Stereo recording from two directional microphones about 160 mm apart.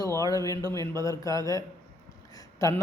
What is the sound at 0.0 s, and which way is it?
Speech, 20° left (ahead or behind).